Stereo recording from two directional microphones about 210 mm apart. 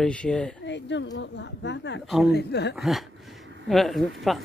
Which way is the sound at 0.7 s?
60° left (ahead or behind).